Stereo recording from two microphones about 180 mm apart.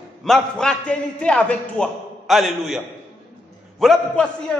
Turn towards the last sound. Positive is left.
turn(degrees=0)  # may be behind; listen again after turning